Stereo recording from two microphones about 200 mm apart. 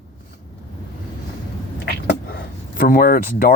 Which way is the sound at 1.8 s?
50° left (ahead or behind).